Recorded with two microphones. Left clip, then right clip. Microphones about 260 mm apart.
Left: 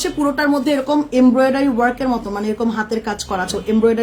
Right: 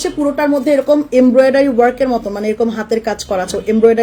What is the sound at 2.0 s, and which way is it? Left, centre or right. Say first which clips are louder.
Speech: right 5 dB; centre.